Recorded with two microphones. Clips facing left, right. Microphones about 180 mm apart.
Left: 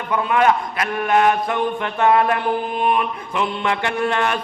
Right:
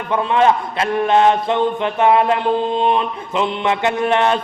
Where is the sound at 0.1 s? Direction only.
25° right (ahead or behind).